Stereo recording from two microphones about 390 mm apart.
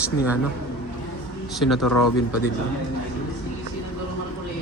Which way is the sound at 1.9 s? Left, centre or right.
Left.